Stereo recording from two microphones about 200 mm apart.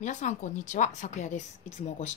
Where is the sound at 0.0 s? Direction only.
35° left (ahead or behind).